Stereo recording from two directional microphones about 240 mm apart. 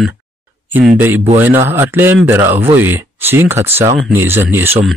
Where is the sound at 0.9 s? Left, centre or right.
Centre.